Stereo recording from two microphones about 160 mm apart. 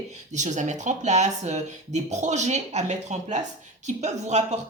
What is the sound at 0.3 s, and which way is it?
Speech, 50° right (ahead or behind).